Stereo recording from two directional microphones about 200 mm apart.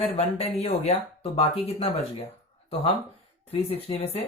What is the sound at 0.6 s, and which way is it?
Speech, 30° left (ahead or behind).